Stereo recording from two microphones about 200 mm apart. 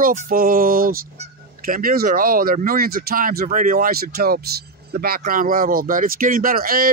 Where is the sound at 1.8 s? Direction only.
45° right (ahead or behind).